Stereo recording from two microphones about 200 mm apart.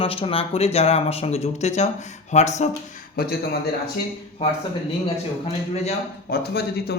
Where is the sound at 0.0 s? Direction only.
30° left (ahead or behind).